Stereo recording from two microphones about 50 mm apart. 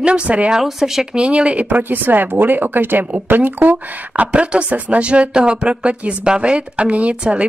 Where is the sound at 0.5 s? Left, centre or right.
Centre.